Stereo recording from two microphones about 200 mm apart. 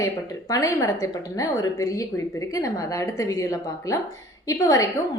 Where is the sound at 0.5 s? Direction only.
15° left (ahead or behind).